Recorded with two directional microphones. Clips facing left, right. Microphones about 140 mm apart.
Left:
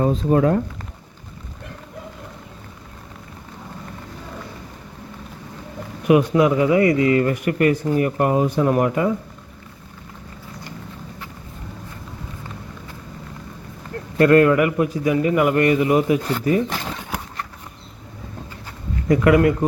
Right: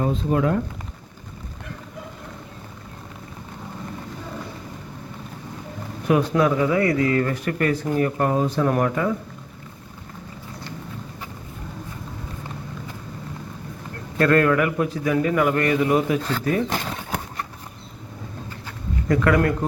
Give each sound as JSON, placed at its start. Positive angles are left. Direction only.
{"t": 0.0, "sound": "speech", "side_deg": 35}
{"t": 6.1, "sound": "speech", "side_deg": 10}
{"t": 14.2, "sound": "speech", "side_deg": 10}
{"t": 19.0, "sound": "speech", "side_deg": 15}